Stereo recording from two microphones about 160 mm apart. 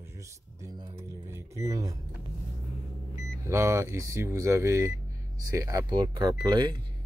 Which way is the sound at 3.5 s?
15° right (ahead or behind).